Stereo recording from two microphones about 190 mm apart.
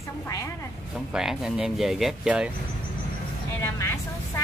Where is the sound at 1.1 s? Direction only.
5° right (ahead or behind).